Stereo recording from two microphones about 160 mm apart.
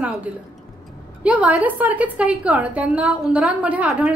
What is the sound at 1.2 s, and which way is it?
A woman's voice, 10° right (ahead or behind).